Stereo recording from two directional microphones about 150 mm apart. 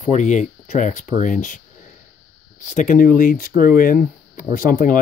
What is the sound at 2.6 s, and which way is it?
Speech, 55° left (ahead or behind).